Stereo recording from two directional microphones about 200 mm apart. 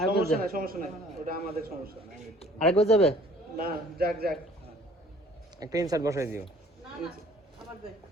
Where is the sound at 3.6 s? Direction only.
50° right (ahead or behind).